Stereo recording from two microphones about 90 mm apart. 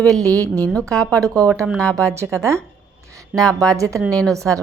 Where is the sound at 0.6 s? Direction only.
5° left (ahead or behind).